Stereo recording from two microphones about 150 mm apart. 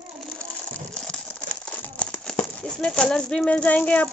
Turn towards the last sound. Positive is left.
turn(degrees=10)  # may be behind; listen again after turning